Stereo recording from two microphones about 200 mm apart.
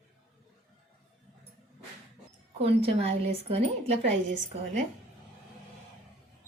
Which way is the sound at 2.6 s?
30° right (ahead or behind).